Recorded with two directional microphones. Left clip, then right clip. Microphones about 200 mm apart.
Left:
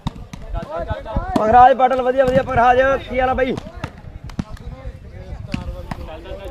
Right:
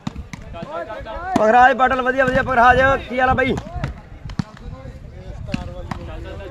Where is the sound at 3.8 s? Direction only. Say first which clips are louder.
Even; 20° left (ahead or behind).